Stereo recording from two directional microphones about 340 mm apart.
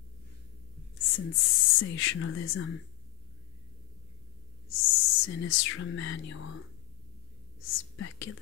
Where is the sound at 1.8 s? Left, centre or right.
Left.